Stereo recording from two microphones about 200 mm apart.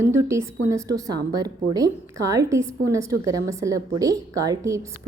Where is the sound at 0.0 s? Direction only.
15° right (ahead or behind).